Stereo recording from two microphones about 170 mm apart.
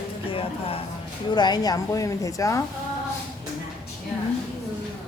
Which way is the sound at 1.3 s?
25° left (ahead or behind).